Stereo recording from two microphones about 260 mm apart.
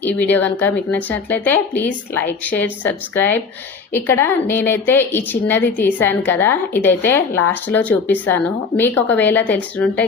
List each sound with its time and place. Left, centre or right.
0.0 s a woman's voice: centre